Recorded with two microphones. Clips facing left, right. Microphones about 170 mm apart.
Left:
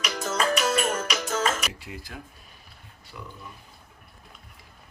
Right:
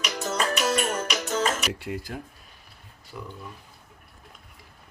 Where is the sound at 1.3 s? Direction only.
40° right (ahead or behind).